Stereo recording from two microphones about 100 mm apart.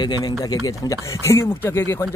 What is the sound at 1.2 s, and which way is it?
Speech, 25° left (ahead or behind).